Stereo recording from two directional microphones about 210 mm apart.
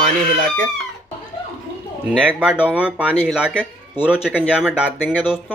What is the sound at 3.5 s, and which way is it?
Speech, 5° left (ahead or behind).